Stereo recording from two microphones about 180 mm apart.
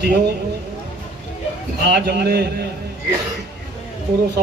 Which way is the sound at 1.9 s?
65° right (ahead or behind).